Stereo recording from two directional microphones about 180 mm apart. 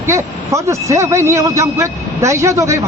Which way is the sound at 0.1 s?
15° right (ahead or behind).